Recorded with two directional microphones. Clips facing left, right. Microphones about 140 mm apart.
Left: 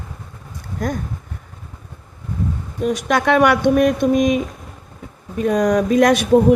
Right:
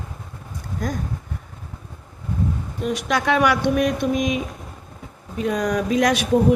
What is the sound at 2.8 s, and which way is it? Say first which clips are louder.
Speech: left 4 dB; 50° left (ahead or behind).